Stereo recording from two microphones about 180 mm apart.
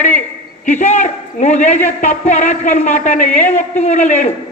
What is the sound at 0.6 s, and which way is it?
A woman's voice, 40° left (ahead or behind).